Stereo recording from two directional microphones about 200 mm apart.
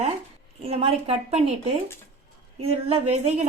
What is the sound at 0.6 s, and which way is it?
A woman's voice, 30° right (ahead or behind).